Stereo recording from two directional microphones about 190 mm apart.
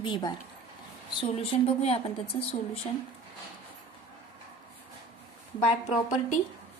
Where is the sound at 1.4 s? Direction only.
30° left (ahead or behind).